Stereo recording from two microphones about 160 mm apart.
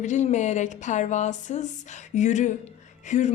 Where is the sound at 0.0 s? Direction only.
45° left (ahead or behind).